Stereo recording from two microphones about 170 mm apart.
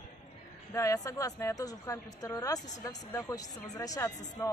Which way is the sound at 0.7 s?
20° left (ahead or behind).